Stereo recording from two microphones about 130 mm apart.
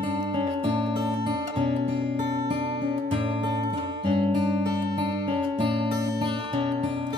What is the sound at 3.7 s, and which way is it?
Music, 40° right (ahead or behind).